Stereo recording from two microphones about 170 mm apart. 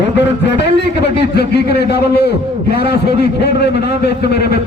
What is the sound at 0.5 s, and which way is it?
A man's voice, 80° left.